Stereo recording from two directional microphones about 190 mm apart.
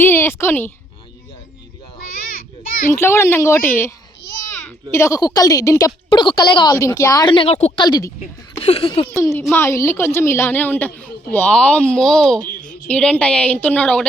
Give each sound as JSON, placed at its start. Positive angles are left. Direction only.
{"t": 0.0, "sound": "a woman's voice", "side_deg": 10}
{"t": 2.9, "sound": "a woman's voice", "side_deg": 15}
{"t": 7.9, "sound": "a woman's voice", "side_deg": 20}
{"t": 8.5, "sound": "speech", "side_deg": 30}
{"t": 9.5, "sound": "a woman's voice", "side_deg": 15}